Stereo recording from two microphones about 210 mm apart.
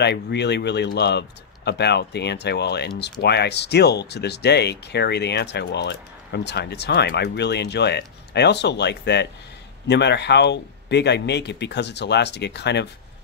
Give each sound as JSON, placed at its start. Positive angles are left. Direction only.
{"t": 0.0, "sound": "speech", "side_deg": 55}